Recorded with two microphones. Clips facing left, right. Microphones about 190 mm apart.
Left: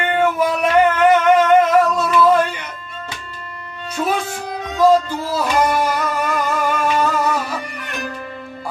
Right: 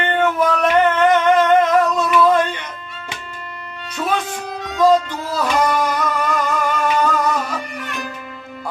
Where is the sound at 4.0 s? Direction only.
5° left (ahead or behind).